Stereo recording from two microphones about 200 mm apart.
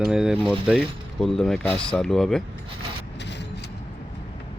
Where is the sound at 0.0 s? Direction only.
5° right (ahead or behind).